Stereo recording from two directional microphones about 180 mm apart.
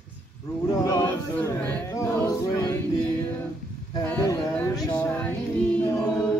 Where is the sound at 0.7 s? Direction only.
20° left (ahead or behind).